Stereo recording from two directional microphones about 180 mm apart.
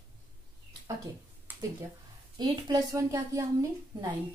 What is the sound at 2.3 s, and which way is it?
A woman's voice, 20° right (ahead or behind).